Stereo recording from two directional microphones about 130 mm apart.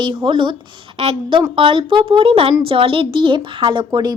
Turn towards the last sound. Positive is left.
turn(degrees=-35)  # may be behind; listen again after turning